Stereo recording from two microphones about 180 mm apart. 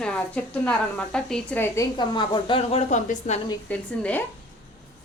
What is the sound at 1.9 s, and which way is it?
A woman's voice, 25° left (ahead or behind).